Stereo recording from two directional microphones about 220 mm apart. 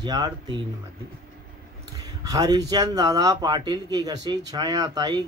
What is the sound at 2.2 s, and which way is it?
A man's voice, 15° right (ahead or behind).